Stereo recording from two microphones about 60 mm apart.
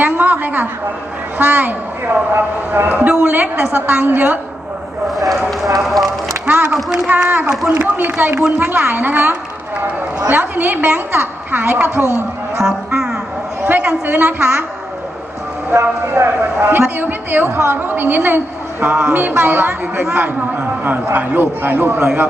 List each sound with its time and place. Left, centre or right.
0.0 s speech: right
5.1 s speech: centre
7.3 s speech: right
7.7 s a man's voice: right
8.2 s speech: right
8.5 s a woman's voice: right
12.6 s speech: centre
14.1 s speech: right
14.3 s speech: right
15.7 s speech: right